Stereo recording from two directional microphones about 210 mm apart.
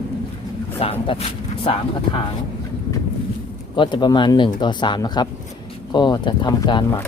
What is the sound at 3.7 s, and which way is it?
Speech, 20° left (ahead or behind).